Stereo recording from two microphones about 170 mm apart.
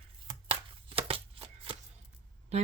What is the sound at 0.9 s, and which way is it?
Shuffling cards, 35° right (ahead or behind).